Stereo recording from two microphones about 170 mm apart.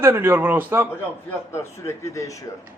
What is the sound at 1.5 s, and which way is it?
Speech, 15° left (ahead or behind).